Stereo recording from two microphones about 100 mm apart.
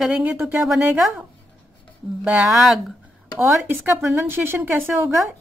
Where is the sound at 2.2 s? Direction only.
5° right (ahead or behind).